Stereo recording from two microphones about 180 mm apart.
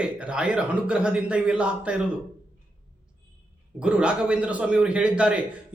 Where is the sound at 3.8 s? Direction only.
5° right (ahead or behind).